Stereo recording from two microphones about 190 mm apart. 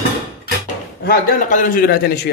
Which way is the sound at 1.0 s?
50° left (ahead or behind).